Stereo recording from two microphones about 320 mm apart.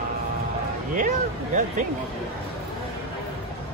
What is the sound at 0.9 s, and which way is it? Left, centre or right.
Speech, right.